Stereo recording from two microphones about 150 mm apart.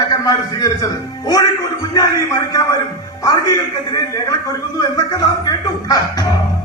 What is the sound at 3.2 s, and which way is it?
A man's voice, 25° left (ahead or behind).